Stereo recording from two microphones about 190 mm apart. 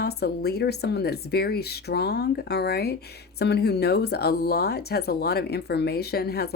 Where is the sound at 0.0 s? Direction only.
55° left (ahead or behind).